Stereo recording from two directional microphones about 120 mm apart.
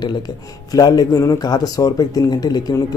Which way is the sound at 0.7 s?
30° left (ahead or behind).